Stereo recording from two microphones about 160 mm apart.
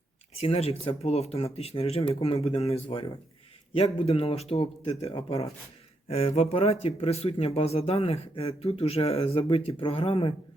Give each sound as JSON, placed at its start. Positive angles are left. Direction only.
{"t": 0.3, "sound": "speech", "side_deg": 40}